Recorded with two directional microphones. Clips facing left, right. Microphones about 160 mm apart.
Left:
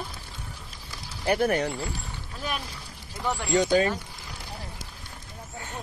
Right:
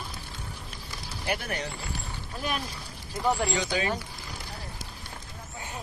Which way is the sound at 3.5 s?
45° left (ahead or behind).